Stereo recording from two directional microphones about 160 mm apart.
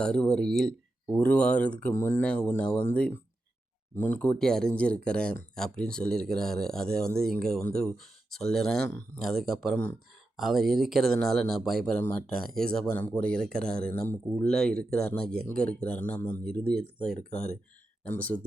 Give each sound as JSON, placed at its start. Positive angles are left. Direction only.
{"t": 0.0, "sound": "speech", "side_deg": 5}
{"t": 17.3, "sound": "speech", "side_deg": 45}
{"t": 18.1, "sound": "speech", "side_deg": 10}